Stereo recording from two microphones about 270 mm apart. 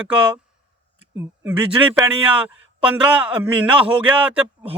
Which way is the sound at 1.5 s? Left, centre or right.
Centre.